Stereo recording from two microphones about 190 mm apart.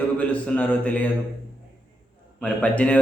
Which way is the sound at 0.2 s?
5° left (ahead or behind).